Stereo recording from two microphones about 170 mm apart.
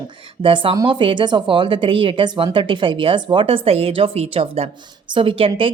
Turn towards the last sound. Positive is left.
turn(degrees=-30)  # may be behind; listen again after turning